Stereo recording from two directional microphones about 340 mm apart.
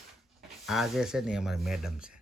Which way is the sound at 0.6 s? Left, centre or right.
Centre.